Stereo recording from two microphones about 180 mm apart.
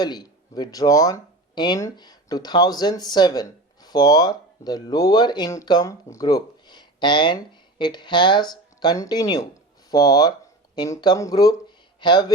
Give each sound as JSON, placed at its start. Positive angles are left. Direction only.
{"t": 0.0, "sound": "speech", "side_deg": 20}